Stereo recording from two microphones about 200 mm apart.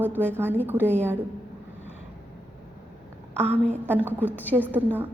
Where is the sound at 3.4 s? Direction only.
10° right (ahead or behind).